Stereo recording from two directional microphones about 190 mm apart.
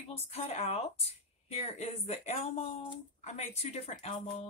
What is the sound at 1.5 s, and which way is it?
Speech, 35° left (ahead or behind).